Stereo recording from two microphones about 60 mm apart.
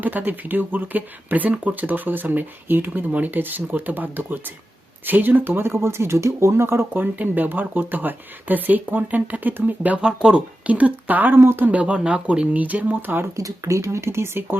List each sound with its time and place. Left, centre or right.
0.0 s speech: right
10.0 s speech: centre; by 11.3 s right
11.3 s speech: right
11.6 s speech: right
13.3 s speech: right